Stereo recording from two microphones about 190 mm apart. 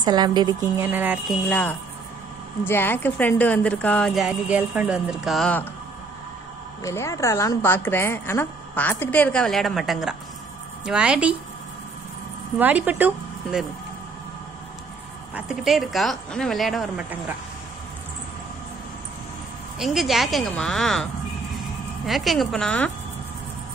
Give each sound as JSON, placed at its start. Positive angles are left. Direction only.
{"t": 0.0, "sound": "a woman's voice", "side_deg": -20}
{"t": 1.5, "sound": "a woman's voice", "side_deg": 10}
{"t": 6.8, "sound": "a woman's voice", "side_deg": 15}
{"t": 12.5, "sound": "speech", "side_deg": -10}
{"t": 15.3, "sound": "speech", "side_deg": 0}
{"t": 19.8, "sound": "speech", "side_deg": 0}